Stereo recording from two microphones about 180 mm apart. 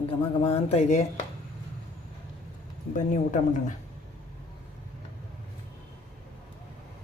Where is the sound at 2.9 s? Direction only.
45° left (ahead or behind).